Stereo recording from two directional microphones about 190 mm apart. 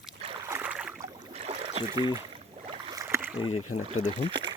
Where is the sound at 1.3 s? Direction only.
35° right (ahead or behind).